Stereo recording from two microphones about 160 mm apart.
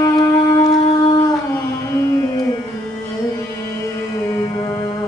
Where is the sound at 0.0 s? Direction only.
20° left (ahead or behind).